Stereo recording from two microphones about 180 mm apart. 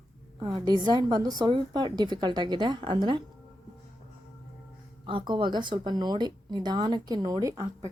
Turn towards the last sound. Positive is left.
turn(degrees=-20)  # may be behind; listen again after turning